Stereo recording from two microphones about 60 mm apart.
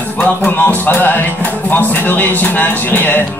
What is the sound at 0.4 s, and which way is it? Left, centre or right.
Music, left.